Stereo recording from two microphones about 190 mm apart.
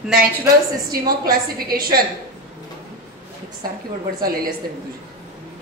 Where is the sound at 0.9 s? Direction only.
50° right (ahead or behind).